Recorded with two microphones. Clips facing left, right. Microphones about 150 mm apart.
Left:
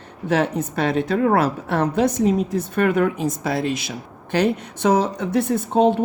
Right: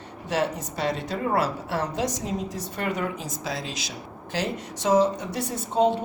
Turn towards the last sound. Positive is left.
turn(degrees=60)  # may be behind; listen again after turning